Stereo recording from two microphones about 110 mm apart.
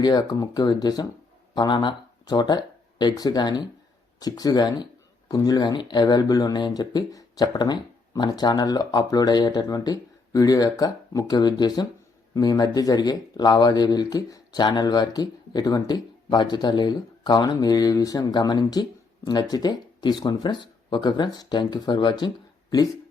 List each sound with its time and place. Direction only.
0.0 s speech: 40° left (ahead or behind)